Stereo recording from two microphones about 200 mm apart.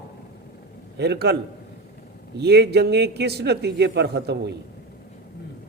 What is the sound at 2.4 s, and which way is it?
A man's voice, 55° right (ahead or behind).